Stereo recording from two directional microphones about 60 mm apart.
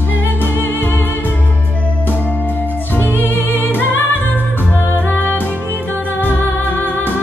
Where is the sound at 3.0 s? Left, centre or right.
Left.